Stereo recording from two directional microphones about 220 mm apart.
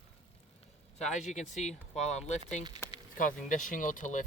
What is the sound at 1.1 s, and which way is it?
Speech, 35° left (ahead or behind).